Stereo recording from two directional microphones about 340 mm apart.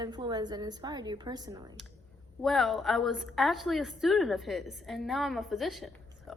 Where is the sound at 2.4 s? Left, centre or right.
Centre.